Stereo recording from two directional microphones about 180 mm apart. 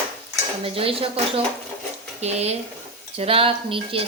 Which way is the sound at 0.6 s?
30° right (ahead or behind).